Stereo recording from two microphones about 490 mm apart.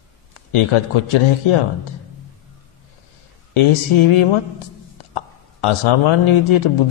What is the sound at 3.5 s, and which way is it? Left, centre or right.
A man's voice, left.